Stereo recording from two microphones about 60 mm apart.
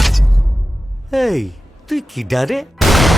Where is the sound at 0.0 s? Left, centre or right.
Centre.